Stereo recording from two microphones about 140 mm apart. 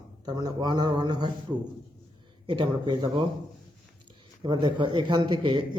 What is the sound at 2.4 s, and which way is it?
Speech, 35° right (ahead or behind).